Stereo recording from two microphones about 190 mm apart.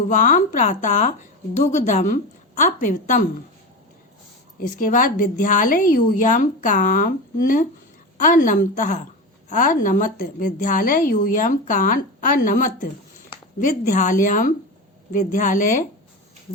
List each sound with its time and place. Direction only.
0.1 s a woman's voice: 40° left (ahead or behind)
4.8 s a woman's voice: 45° left (ahead or behind)